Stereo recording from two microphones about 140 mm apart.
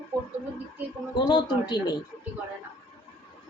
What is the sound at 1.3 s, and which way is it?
Speech, 30° left (ahead or behind).